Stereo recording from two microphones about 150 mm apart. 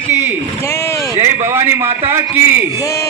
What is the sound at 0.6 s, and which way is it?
Speech, 15° left (ahead or behind).